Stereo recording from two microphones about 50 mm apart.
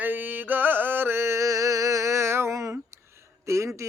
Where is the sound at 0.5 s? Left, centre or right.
Right.